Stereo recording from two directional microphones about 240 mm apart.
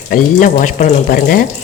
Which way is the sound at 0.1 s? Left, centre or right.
Left.